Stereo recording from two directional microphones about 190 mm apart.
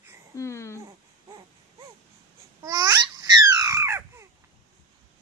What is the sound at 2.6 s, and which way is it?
Babbling, 15° right (ahead or behind).